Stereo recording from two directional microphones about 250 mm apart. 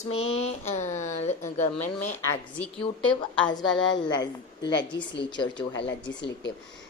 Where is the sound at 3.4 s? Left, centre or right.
Centre.